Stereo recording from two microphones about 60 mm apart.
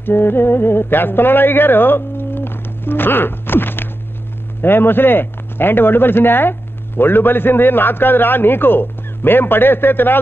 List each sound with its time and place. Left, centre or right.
0.0 s a man's voice: left